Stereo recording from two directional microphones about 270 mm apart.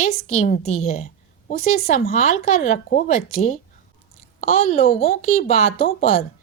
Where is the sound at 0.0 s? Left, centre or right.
Left.